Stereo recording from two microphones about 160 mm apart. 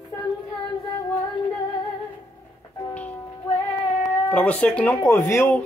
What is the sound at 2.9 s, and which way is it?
Music, 10° left (ahead or behind).